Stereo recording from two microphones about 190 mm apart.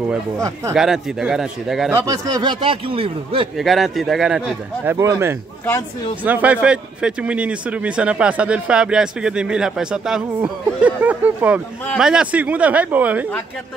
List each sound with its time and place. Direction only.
0.7 s speech: 5° right (ahead or behind)
2.0 s speech: 20° right (ahead or behind)
3.5 s speech: centre (ahead or behind)
4.9 s a man's voice: 15° right (ahead or behind)